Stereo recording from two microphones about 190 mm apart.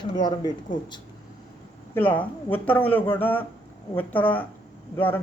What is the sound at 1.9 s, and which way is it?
A woman's voice, 10° left (ahead or behind).